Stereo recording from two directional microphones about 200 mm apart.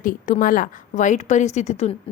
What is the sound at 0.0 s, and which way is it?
A woman's voice, 40° left (ahead or behind).